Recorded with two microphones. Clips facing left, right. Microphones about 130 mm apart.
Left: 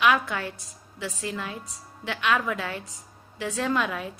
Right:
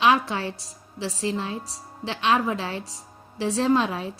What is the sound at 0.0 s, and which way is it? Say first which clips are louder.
A woman's voice: right 2 dB; 30° right (ahead or behind).